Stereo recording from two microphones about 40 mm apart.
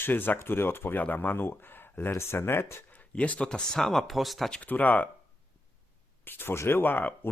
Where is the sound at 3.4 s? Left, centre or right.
Centre.